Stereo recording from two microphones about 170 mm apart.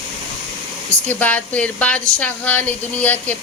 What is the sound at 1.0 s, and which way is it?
Speech, 10° left (ahead or behind).